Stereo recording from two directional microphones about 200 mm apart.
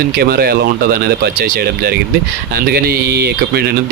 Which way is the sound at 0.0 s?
50° right (ahead or behind).